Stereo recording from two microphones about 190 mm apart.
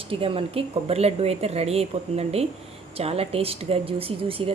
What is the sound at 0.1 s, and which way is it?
Speech, 30° right (ahead or behind).